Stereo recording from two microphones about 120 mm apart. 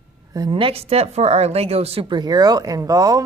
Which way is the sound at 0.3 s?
40° right (ahead or behind).